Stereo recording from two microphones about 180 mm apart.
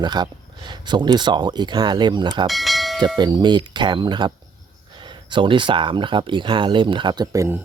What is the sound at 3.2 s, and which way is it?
Speech, 25° right (ahead or behind).